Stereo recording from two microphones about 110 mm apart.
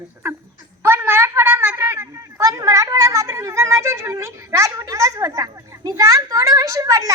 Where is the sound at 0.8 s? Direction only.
20° right (ahead or behind).